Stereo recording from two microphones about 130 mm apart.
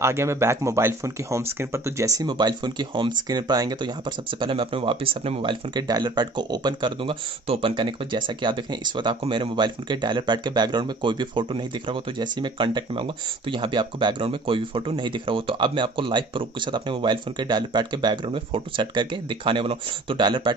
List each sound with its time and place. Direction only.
0.0 s speech: 20° right (ahead or behind)